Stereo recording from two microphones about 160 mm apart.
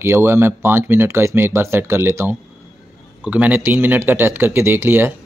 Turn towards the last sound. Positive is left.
turn(degrees=-15)  # may be behind; listen again after turning